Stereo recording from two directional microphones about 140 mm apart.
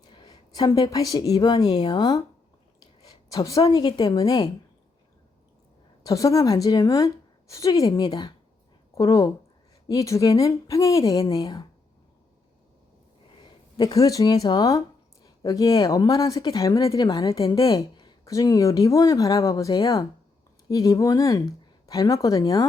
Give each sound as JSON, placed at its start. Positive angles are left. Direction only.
{"t": 0.1, "sound": "a woman's voice", "side_deg": 30}
{"t": 3.3, "sound": "speech", "side_deg": 25}
{"t": 6.0, "sound": "speech", "side_deg": 25}
{"t": 13.4, "sound": "speech", "side_deg": 30}